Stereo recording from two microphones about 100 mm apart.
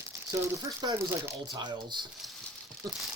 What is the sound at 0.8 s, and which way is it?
Speech, 45° right (ahead or behind).